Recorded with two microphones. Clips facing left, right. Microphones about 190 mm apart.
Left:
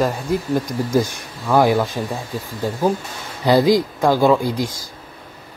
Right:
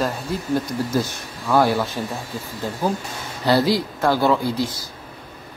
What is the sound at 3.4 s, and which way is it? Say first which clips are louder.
Speech: left 4 dB; 15° left (ahead or behind).